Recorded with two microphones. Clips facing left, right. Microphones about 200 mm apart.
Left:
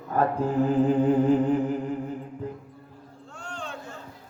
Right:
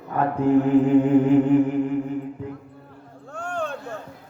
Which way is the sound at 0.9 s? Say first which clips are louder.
Right 4 dB; 35° left (ahead or behind).